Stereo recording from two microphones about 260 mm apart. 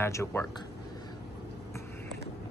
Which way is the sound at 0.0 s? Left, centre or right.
Centre.